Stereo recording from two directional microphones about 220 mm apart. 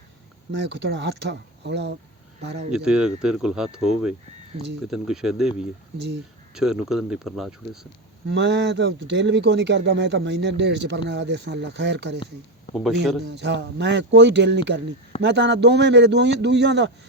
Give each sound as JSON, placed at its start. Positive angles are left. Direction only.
{"t": 0.7, "sound": "a man's voice", "side_deg": -55}
{"t": 2.7, "sound": "speech", "side_deg": -5}
{"t": 4.9, "sound": "speech", "side_deg": 0}
{"t": 8.3, "sound": "a man's voice", "side_deg": -50}
{"t": 12.7, "sound": "speech", "side_deg": 0}
{"t": 13.3, "sound": "a man's voice", "side_deg": -50}